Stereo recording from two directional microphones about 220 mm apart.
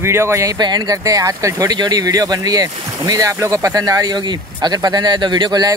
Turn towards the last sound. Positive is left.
turn(degrees=-20)  # may be behind; listen again after turning